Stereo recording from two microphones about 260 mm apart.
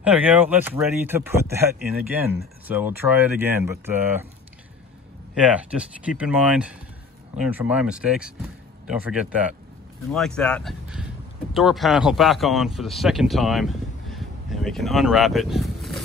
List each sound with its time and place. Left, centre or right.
0.0 s speech: centre
5.5 s speech: centre